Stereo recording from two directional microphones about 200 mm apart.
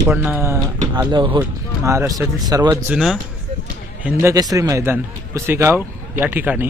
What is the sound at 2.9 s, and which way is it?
Speech, centre (ahead or behind).